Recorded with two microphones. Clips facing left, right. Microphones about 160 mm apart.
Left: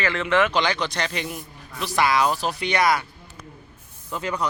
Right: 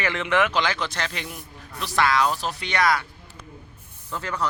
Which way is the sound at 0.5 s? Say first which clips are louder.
Left 2 dB; 5° right (ahead or behind).